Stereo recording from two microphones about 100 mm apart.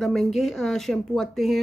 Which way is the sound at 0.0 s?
Centre (ahead or behind).